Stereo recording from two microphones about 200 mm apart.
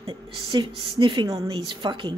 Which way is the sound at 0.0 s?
25° right (ahead or behind).